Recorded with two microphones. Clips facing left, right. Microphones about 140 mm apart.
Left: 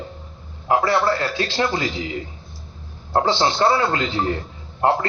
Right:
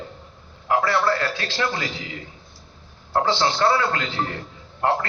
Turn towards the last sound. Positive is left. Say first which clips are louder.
# left 3 dB
turn(degrees=25)  # may be behind; listen again after turning